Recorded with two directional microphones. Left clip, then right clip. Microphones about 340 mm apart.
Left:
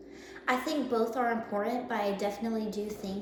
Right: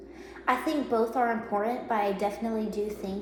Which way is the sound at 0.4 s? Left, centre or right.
Centre.